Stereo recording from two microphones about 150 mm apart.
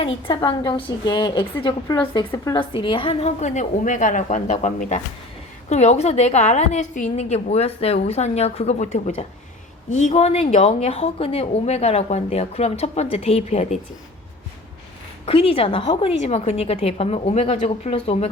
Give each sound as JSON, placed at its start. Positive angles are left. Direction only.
{"t": 0.0, "sound": "a woman's voice", "side_deg": 35}
{"t": 2.6, "sound": "a woman's voice", "side_deg": 35}
{"t": 15.3, "sound": "a woman's voice", "side_deg": 40}